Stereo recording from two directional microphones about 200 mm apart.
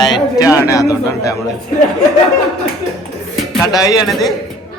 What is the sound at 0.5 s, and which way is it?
Speech, 15° left (ahead or behind).